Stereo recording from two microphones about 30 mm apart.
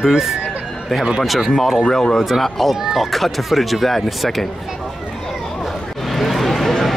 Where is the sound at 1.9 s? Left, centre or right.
Centre.